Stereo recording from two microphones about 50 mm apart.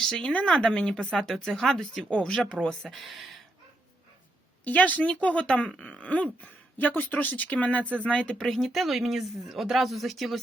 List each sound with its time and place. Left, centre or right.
0.2 s speech: left
1.1 s speech: centre
2.9 s speech: centre
4.6 s speech: left
8.0 s speech: centre